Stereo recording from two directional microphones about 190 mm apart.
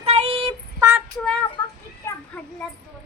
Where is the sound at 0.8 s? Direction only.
10° right (ahead or behind).